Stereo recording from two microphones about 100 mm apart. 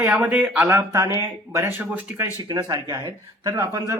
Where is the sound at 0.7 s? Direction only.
30° right (ahead or behind).